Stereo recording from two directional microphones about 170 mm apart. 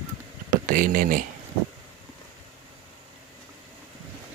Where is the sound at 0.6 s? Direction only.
55° right (ahead or behind).